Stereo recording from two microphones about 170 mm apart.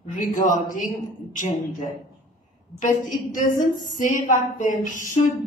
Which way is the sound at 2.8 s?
50° left (ahead or behind).